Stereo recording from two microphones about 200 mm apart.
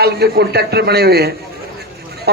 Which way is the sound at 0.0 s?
55° right (ahead or behind).